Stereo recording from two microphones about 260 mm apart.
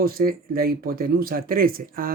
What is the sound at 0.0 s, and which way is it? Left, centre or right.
Speech, right.